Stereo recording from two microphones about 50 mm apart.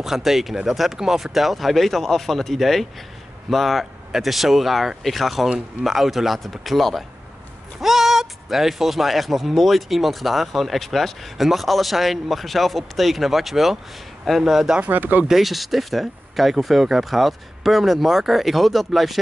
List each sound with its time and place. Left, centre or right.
0.0 s speech: centre
14.9 s speech: right
15.2 s speech: centre